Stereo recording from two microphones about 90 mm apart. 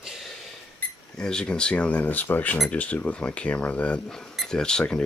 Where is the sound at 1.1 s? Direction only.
10° left (ahead or behind).